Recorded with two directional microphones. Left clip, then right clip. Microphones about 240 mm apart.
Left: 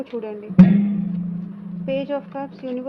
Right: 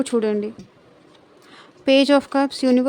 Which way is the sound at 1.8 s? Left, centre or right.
Right.